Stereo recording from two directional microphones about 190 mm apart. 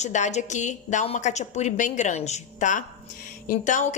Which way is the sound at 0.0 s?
40° left (ahead or behind).